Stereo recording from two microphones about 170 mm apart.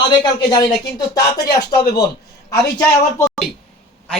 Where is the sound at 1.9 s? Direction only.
25° left (ahead or behind).